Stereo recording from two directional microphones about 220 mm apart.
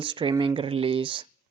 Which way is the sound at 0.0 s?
20° right (ahead or behind).